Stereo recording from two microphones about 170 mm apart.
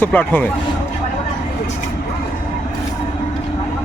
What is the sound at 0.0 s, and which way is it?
Speech, 10° left (ahead or behind).